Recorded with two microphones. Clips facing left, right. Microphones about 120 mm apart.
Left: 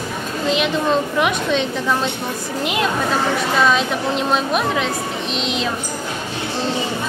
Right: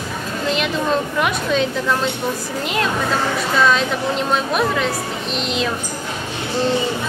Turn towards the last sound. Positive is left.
turn(degrees=0)  # may be behind; listen again after turning